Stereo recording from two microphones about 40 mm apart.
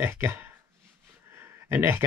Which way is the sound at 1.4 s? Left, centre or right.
Right.